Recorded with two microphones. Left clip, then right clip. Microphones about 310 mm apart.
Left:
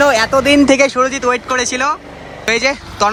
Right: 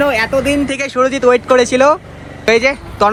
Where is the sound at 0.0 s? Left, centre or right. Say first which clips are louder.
Left 2 dB; centre.